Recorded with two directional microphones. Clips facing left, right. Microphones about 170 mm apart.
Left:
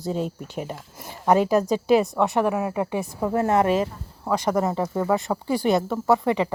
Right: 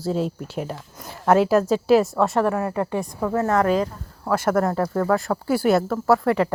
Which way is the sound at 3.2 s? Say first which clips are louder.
Even; 25° left (ahead or behind).